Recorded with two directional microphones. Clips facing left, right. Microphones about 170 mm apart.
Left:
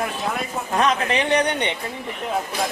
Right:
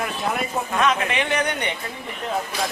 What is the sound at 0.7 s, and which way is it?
Speech, 35° left (ahead or behind).